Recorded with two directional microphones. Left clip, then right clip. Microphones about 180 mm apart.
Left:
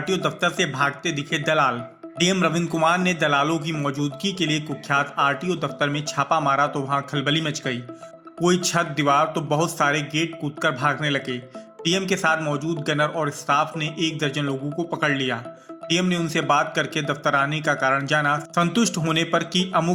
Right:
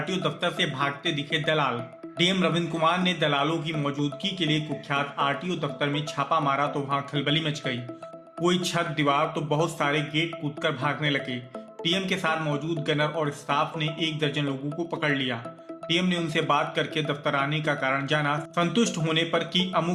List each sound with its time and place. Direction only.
0.0 s a man's voice: 30° left (ahead or behind)